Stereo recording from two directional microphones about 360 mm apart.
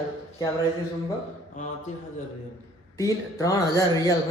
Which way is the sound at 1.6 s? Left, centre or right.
Left.